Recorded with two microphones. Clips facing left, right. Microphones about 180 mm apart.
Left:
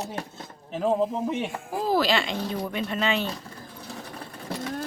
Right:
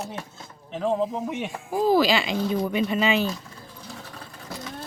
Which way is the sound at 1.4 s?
Centre (ahead or behind).